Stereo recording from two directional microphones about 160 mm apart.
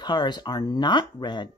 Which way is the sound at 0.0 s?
25° left (ahead or behind).